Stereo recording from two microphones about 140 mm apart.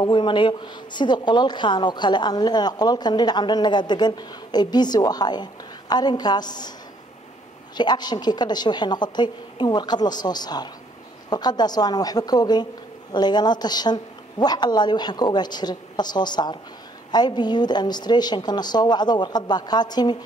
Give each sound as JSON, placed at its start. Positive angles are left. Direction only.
{"t": 0.0, "sound": "a woman's voice", "side_deg": 35}
{"t": 7.7, "sound": "a woman's voice", "side_deg": 30}